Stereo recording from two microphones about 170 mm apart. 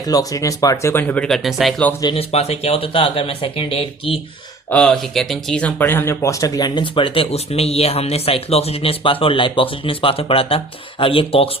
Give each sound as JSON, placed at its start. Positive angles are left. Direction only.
{"t": 0.0, "sound": "speech", "side_deg": 20}
{"t": 2.0, "sound": "speech", "side_deg": 30}
{"t": 4.7, "sound": "speech", "side_deg": 5}